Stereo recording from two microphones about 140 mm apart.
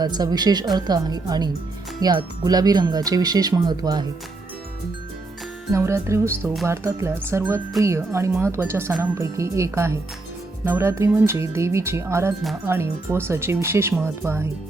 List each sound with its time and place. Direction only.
0.0 s speech: 30° right (ahead or behind)
5.7 s speech: 20° right (ahead or behind)